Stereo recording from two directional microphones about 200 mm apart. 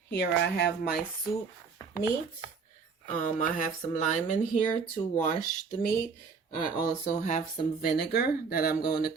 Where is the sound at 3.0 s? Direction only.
40° left (ahead or behind).